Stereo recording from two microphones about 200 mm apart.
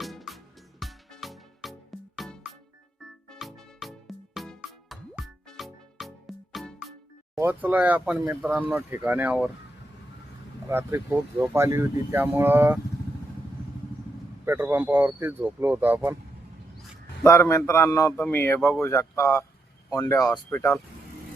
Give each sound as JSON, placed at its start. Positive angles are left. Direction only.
{"t": 0.0, "sound": "music", "side_deg": 0}
{"t": 7.3, "sound": "speech", "side_deg": -10}
{"t": 10.7, "sound": "speech", "side_deg": -10}
{"t": 14.4, "sound": "speech", "side_deg": -10}
{"t": 17.2, "sound": "a man's voice", "side_deg": 15}